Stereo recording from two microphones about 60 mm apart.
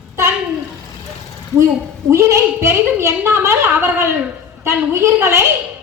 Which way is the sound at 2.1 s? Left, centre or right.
Right.